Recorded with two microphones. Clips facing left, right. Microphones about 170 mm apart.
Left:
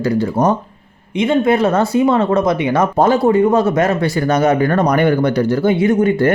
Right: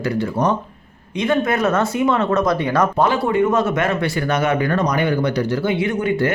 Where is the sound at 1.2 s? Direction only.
25° left (ahead or behind).